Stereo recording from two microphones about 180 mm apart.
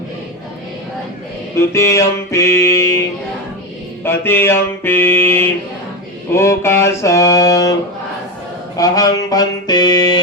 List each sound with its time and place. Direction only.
1.7 s mantra: 15° left (ahead or behind)
4.0 s mantra: 15° left (ahead or behind)
8.8 s mantra: 20° left (ahead or behind)